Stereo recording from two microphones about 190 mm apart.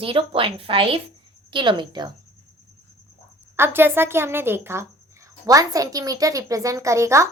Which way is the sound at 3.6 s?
10° right (ahead or behind).